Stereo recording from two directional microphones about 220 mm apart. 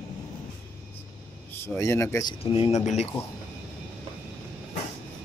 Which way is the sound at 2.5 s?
30° left (ahead or behind).